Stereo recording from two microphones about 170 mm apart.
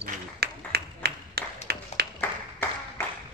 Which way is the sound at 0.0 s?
70° right (ahead or behind).